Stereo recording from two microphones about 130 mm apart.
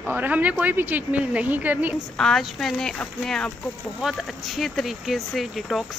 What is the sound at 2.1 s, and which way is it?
Speech, 5° left (ahead or behind).